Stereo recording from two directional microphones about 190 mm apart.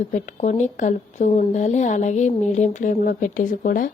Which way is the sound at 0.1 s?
40° left (ahead or behind).